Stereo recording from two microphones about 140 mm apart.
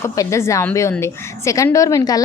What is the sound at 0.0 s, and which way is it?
A woman's voice, 20° left (ahead or behind).